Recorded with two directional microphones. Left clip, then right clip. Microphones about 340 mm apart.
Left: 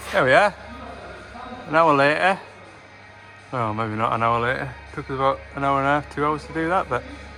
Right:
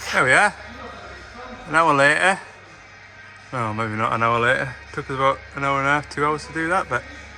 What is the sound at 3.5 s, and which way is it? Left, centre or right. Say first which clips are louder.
Speech: even; centre.